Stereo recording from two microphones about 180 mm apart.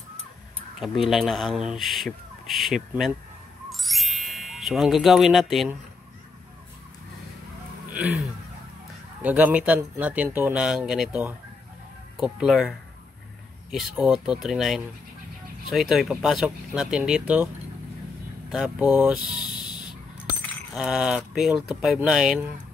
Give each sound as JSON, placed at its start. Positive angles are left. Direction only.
{"t": 0.7, "sound": "speech", "side_deg": 0}
{"t": 3.7, "sound": "music", "side_deg": 0}
{"t": 9.2, "sound": "speech", "side_deg": -10}
{"t": 18.5, "sound": "speech", "side_deg": 0}
{"t": 19.4, "sound": "a sound", "side_deg": 25}
{"t": 20.7, "sound": "speech", "side_deg": -5}